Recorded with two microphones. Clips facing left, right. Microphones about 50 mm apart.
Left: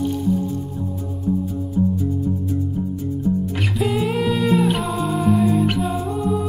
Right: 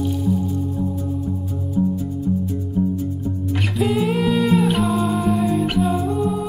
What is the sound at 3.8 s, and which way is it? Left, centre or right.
Music, centre.